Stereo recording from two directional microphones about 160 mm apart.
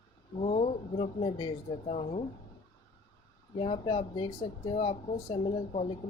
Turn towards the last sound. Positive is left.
turn(degrees=35)  # may be behind; listen again after turning